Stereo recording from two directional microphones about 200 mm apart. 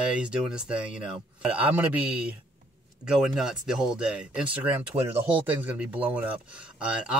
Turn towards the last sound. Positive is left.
turn(degrees=-5)  # may be behind; listen again after turning